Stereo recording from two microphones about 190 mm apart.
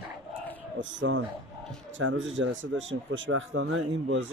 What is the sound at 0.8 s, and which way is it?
Speech, 75° right (ahead or behind).